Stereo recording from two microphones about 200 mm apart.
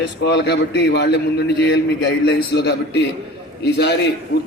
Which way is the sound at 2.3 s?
55° left (ahead or behind).